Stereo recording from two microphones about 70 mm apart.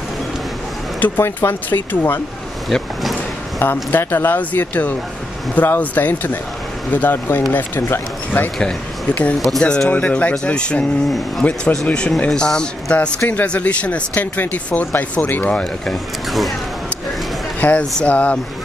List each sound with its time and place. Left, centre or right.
0.9 s speech: left
2.7 s speech: centre
3.5 s speech: left
9.6 s speech: centre
16.3 s speech: centre
17.6 s speech: centre